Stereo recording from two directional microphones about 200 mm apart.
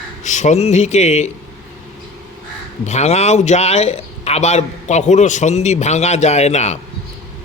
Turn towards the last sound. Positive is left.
turn(degrees=35)  # may be behind; listen again after turning